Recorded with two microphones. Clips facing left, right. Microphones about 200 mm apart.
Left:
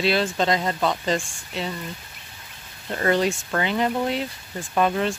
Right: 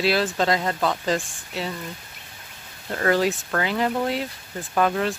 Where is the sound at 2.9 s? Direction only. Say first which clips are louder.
Even; centre (ahead or behind).